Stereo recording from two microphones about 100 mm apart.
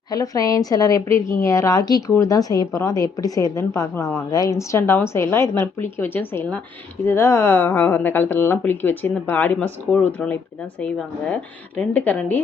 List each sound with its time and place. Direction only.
0.1 s a woman's voice: 35° left (ahead or behind); by 10.3 s 15° left (ahead or behind)
11.8 s a woman's voice: 15° left (ahead or behind)